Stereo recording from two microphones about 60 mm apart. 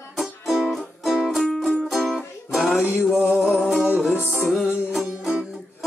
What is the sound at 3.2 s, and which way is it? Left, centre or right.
Music, left.